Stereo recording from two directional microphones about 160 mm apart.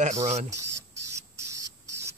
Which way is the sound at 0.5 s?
20° right (ahead or behind).